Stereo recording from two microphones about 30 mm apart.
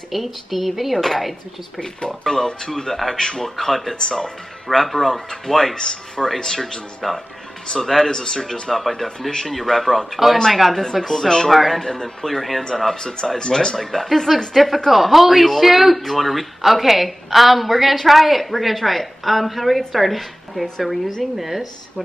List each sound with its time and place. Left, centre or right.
0.1 s a woman's voice: centre
1.8 s speech: left
3.4 s speech: centre
5.8 s speech: left
7.8 s speech: centre
8.1 s speech: left
8.7 s speech: centre
11.5 s a woman's voice: centre
11.8 s speech: centre
12.4 s speech: centre
12.9 s speech: left
13.7 s a woman's voice: centre